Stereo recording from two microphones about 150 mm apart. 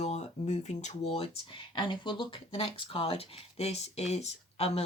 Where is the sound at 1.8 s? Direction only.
35° left (ahead or behind).